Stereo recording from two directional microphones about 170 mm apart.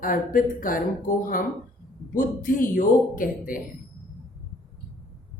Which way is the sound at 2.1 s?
55° left (ahead or behind).